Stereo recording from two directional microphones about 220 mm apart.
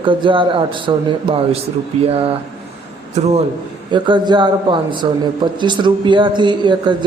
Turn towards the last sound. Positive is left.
turn(degrees=-20)  # may be behind; listen again after turning